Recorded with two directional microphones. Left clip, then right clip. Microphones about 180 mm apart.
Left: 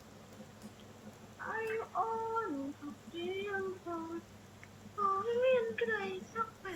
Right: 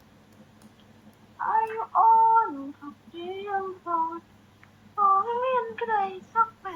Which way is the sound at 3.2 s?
Centre (ahead or behind).